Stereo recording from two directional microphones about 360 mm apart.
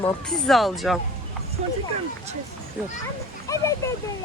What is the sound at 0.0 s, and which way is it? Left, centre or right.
Speech, centre.